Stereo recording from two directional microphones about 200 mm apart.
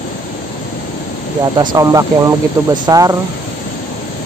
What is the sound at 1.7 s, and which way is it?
Speech, 15° right (ahead or behind).